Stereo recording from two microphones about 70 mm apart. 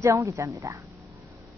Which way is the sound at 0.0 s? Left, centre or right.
Right.